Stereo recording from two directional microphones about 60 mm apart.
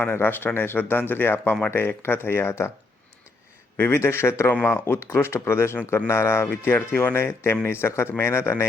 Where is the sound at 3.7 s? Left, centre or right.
Left.